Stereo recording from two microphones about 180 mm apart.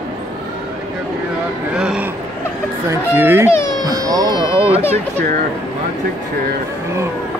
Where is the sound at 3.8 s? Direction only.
20° right (ahead or behind).